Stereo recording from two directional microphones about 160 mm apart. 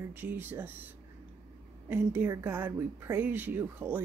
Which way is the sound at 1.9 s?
15° right (ahead or behind).